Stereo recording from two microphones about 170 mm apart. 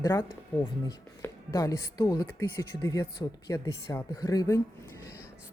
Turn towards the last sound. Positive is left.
turn(degrees=20)  # may be behind; listen again after turning